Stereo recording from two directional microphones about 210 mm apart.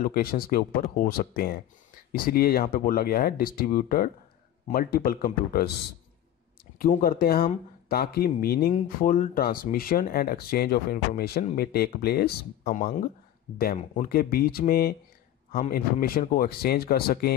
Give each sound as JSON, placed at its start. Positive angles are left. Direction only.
{"t": 0.0, "sound": "speech", "side_deg": 45}
{"t": 6.8, "sound": "speech", "side_deg": 45}